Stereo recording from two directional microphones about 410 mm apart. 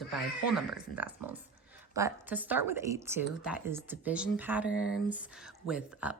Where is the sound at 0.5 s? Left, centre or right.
Centre.